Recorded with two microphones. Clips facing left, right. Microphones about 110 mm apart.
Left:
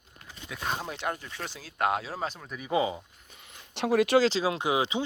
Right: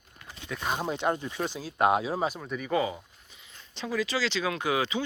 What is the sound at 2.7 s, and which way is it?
Speech, 20° left (ahead or behind).